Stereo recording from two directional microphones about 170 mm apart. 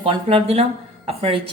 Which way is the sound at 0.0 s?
35° right (ahead or behind).